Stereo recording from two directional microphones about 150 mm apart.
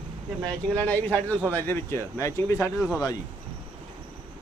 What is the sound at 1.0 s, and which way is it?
Speech, 10° left (ahead or behind).